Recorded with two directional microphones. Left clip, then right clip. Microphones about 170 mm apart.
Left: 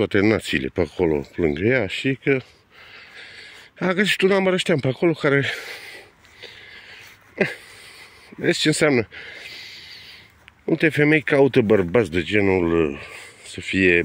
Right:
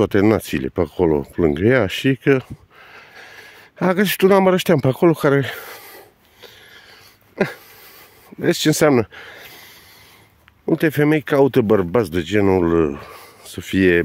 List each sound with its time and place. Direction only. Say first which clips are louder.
0.0 s speech: right 3 dB; 25° right (ahead or behind); by 2.4 s 45° right (ahead or behind)
3.7 s speech: right 2 dB; 30° right (ahead or behind)
5.2 s speech: right 2 dB; 25° right (ahead or behind)
8.4 s speech: right 3 dB; 25° right (ahead or behind)
12.4 s speech: right 3 dB; 35° right (ahead or behind)